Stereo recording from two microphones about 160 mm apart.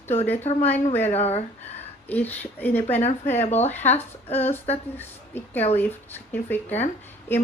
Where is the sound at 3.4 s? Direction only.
45° left (ahead or behind).